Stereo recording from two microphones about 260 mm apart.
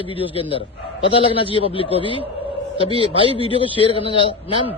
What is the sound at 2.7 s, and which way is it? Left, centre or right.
Speech, right.